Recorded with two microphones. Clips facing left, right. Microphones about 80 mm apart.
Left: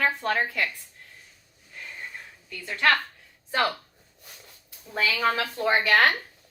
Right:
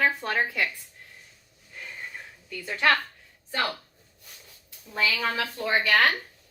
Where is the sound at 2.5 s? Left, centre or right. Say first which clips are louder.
Even; centre.